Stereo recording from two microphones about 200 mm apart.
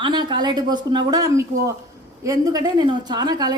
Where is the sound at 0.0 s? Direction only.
20° right (ahead or behind).